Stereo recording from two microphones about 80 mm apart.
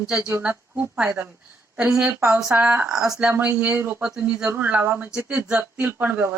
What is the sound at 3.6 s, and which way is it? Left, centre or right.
Speech, right.